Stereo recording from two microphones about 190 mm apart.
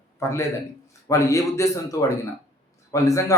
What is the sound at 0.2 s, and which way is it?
A man's voice, 15° left (ahead or behind).